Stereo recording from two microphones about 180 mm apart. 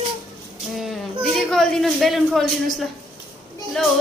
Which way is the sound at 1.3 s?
Centre (ahead or behind).